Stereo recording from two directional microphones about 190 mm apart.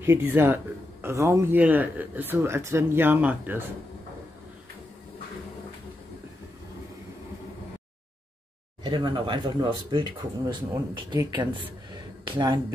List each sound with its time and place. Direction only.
0.0 s speech: 10° right (ahead or behind)
8.8 s speech: 25° right (ahead or behind)